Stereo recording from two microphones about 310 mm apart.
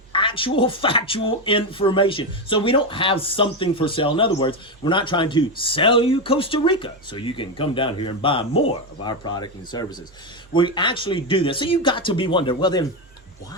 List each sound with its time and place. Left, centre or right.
0.1 s speech: centre